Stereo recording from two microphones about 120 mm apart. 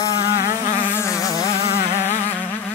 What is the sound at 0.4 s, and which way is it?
Insect, 15° right (ahead or behind).